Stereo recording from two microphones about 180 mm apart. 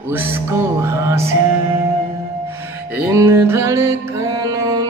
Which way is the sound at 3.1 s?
15° right (ahead or behind).